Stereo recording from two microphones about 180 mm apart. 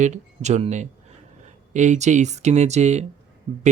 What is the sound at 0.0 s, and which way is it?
Speech, 40° right (ahead or behind).